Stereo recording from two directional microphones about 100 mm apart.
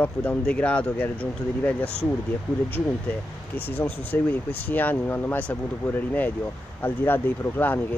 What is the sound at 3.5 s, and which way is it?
Speech, 20° left (ahead or behind).